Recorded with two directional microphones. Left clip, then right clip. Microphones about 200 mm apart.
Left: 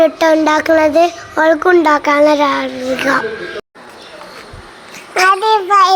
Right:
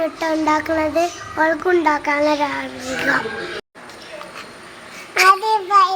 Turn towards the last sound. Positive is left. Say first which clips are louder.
# left 3 dB
turn(degrees=25)  # may be behind; listen again after turning